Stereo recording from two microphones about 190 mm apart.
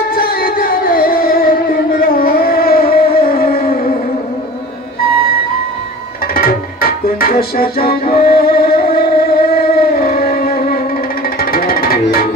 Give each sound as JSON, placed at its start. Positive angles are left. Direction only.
{"t": 0.1, "sound": "music", "side_deg": 55}
{"t": 2.0, "sound": "a sound", "side_deg": 50}
{"t": 6.3, "sound": "music", "side_deg": 50}